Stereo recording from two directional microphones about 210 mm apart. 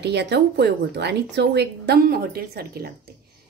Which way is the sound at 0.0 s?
55° right (ahead or behind).